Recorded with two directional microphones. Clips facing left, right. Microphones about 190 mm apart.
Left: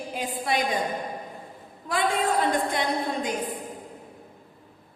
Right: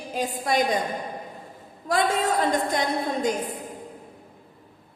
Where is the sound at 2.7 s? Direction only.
45° right (ahead or behind).